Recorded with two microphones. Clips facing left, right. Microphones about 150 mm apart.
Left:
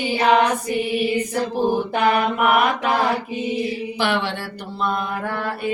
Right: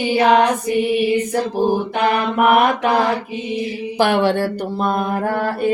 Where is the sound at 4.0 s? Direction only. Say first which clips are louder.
Right 9 dB; 45° right (ahead or behind).